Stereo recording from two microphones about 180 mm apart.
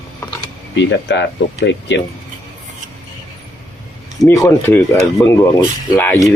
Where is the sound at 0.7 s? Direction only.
80° left.